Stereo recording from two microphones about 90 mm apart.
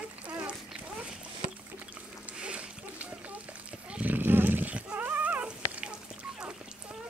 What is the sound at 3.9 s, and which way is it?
Dog, 20° right (ahead or behind).